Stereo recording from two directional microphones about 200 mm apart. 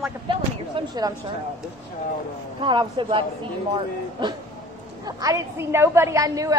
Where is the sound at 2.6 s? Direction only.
25° right (ahead or behind).